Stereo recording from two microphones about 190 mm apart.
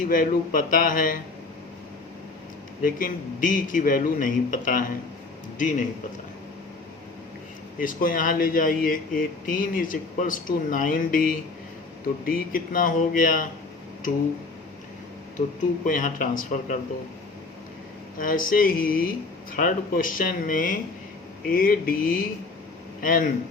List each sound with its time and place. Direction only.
0.0 s speech: 45° left (ahead or behind)
2.8 s speech: 45° left (ahead or behind)
7.8 s speech: 45° left (ahead or behind)
15.4 s speech: 45° left (ahead or behind)
18.2 s speech: 45° left (ahead or behind)